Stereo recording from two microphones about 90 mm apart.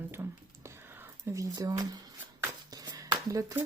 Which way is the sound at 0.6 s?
30° right (ahead or behind).